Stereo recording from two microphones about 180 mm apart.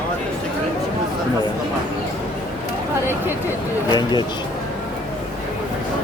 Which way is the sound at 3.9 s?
25° left (ahead or behind).